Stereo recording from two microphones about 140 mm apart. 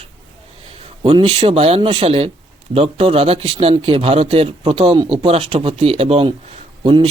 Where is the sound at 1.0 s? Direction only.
45° right (ahead or behind).